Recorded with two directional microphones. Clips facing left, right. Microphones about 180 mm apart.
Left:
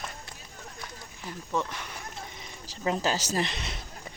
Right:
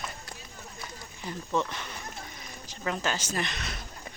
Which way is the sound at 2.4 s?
30° left (ahead or behind).